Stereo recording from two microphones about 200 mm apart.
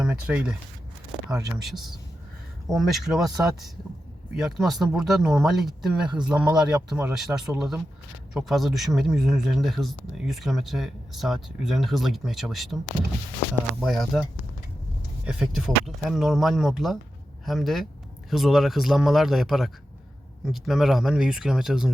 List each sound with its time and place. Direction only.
0.0 s speech: 5° right (ahead or behind)
1.5 s speech: centre (ahead or behind)
4.4 s speech: centre (ahead or behind)
13.8 s speech: centre (ahead or behind)